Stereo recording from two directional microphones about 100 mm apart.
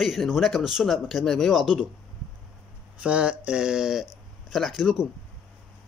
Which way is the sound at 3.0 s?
10° right (ahead or behind).